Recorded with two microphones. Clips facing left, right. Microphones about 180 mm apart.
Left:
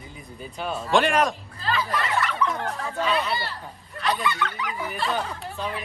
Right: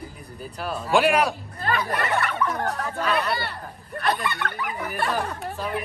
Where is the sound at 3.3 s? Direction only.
60° right (ahead or behind).